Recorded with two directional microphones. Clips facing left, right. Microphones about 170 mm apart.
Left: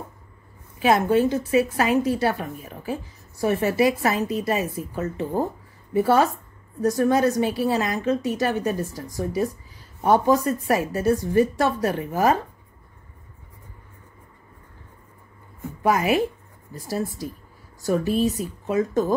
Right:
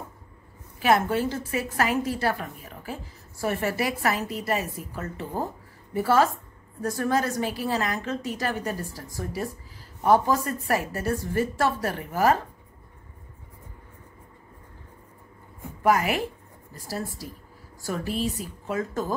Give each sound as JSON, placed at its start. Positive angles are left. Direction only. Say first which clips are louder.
{"t": 0.7, "sound": "a woman's voice", "louder": "left 4 dB", "side_deg": 20}
{"t": 15.8, "sound": "a woman's voice", "louder": "left 3 dB", "side_deg": 20}